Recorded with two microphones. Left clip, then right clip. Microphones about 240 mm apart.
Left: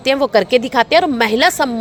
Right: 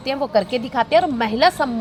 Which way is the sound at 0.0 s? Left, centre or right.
Left.